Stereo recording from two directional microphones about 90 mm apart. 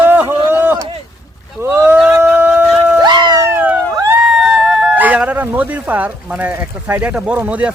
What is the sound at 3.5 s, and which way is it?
Police car, 20° right (ahead or behind).